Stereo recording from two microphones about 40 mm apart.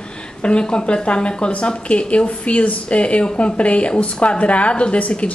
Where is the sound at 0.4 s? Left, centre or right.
Left.